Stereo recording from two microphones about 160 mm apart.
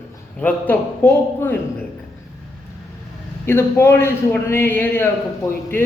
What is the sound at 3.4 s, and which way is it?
A man's voice, 15° left (ahead or behind).